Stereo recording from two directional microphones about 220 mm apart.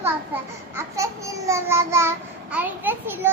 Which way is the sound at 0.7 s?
10° right (ahead or behind).